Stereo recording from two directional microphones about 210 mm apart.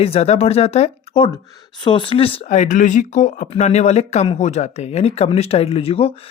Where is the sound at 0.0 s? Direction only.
30° left (ahead or behind).